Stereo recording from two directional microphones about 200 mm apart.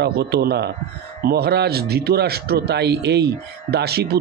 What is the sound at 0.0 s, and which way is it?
A man's voice, 55° right (ahead or behind).